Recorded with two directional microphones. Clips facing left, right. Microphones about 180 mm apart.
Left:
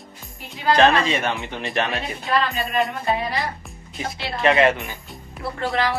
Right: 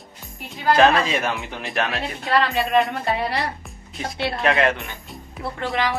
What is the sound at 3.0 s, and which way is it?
Speech, 70° right (ahead or behind).